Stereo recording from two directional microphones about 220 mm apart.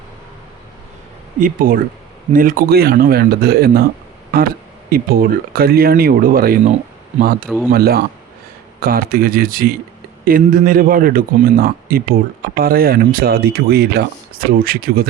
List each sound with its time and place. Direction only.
1.4 s a man's voice: 40° right (ahead or behind)
4.9 s speech: 40° right (ahead or behind)
7.4 s a man's voice: 5° right (ahead or behind)
7.7 s a man's voice: 45° right (ahead or behind)